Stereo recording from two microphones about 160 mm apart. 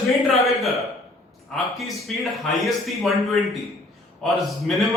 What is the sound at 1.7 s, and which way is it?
Speech, centre (ahead or behind).